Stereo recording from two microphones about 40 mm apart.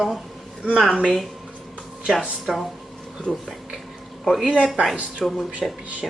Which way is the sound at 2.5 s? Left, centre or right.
Centre.